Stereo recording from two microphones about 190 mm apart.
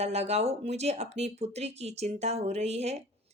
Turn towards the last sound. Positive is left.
turn(degrees=-35)  # may be behind; listen again after turning